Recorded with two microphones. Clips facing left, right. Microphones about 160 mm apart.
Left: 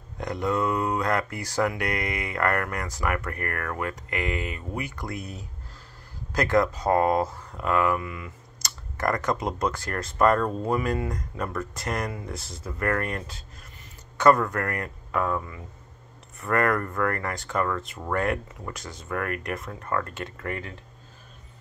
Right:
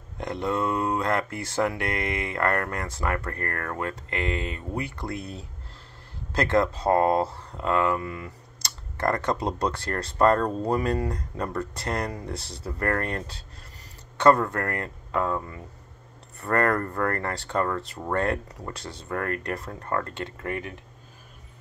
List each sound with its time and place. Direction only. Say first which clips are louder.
0.2 s speech: left 1 dB; 25° right (ahead or behind)